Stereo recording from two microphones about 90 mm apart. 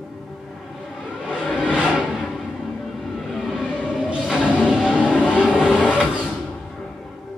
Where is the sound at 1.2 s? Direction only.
10° right (ahead or behind).